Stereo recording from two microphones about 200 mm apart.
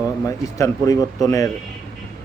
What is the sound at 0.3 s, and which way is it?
Speech, 15° left (ahead or behind).